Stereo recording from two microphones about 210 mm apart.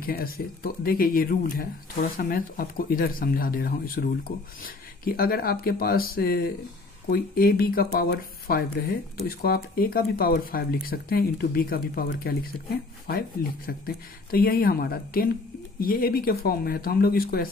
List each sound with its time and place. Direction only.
0.0 s speech: 45° left (ahead or behind)